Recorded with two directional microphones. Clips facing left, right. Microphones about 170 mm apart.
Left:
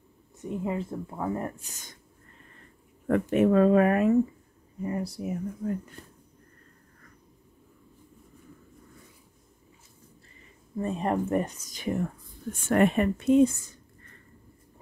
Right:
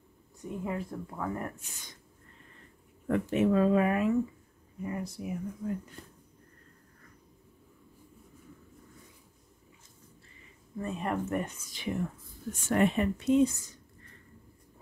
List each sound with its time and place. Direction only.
0.4 s speech: 25° left (ahead or behind)
3.1 s speech: 55° left (ahead or behind)
4.8 s speech: 35° left (ahead or behind)
10.8 s speech: 35° left (ahead or behind)
12.6 s speech: 55° left (ahead or behind)